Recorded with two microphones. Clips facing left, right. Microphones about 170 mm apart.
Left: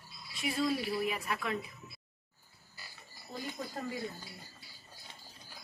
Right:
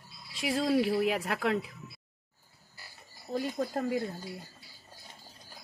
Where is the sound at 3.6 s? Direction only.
55° right (ahead or behind).